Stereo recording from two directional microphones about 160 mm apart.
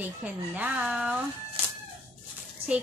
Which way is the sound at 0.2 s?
10° right (ahead or behind).